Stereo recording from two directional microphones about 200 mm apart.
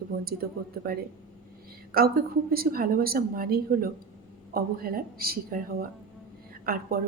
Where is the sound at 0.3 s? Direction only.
50° right (ahead or behind).